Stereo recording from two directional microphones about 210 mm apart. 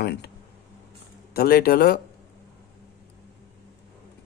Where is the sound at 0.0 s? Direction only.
50° left (ahead or behind).